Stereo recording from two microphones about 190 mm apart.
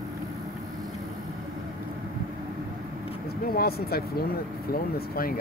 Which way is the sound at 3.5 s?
55° left (ahead or behind).